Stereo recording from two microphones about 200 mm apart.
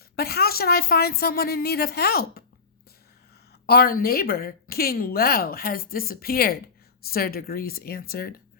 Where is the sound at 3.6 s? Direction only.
50° left (ahead or behind).